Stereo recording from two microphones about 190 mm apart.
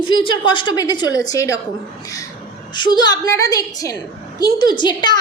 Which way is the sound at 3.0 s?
20° left (ahead or behind).